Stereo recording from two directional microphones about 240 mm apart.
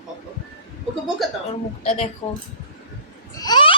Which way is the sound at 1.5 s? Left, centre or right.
Left.